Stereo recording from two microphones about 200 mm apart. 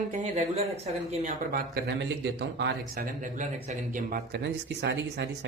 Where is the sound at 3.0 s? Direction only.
40° right (ahead or behind).